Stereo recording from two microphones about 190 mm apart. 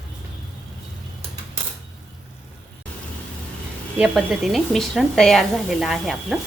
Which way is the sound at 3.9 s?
5° right (ahead or behind).